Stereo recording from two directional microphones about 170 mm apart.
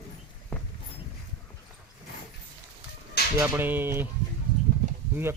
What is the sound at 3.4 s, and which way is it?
Speech, 10° right (ahead or behind).